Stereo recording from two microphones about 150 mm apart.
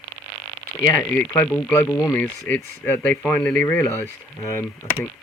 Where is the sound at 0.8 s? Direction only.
15° left (ahead or behind).